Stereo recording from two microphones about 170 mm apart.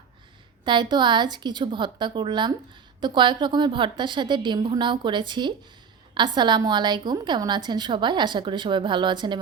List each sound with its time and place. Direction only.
0.6 s a woman's voice: 25° right (ahead or behind)